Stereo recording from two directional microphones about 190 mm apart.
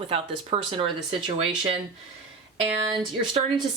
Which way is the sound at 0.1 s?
30° right (ahead or behind).